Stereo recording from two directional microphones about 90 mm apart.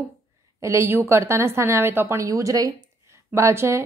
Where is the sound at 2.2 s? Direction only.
35° right (ahead or behind).